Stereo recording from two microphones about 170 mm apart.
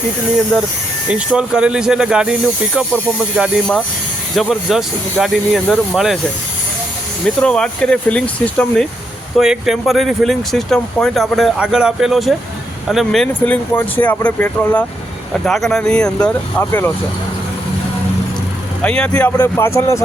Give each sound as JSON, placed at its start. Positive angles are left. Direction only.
{"t": 1.1, "sound": "speech", "side_deg": -5}
{"t": 7.3, "sound": "speech", "side_deg": 5}
{"t": 18.8, "sound": "speech", "side_deg": 5}